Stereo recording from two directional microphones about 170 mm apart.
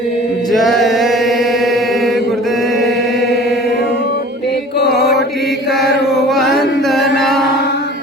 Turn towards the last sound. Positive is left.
turn(degrees=0)  # may be behind; listen again after turning